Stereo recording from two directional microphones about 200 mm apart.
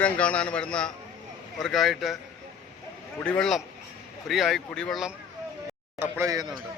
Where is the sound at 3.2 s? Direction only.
5° left (ahead or behind).